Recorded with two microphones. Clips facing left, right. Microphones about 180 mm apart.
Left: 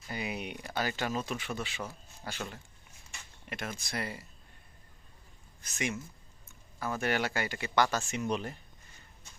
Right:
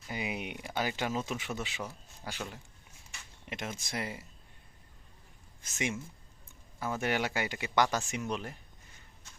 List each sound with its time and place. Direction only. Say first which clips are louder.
0.1 s speech: even; 15° right (ahead or behind)
3.5 s speech: even; 20° right (ahead or behind)
5.6 s speech: even; 25° right (ahead or behind)
8.2 s speech: left 3 dB; 5° right (ahead or behind)